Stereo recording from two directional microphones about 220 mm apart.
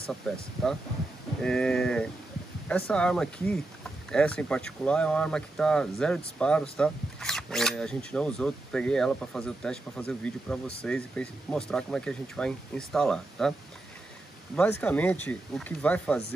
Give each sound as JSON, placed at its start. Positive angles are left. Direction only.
{"t": 0.3, "sound": "speech", "side_deg": 0}